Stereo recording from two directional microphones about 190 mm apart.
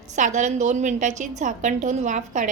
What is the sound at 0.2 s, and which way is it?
A woman's voice, 40° right (ahead or behind).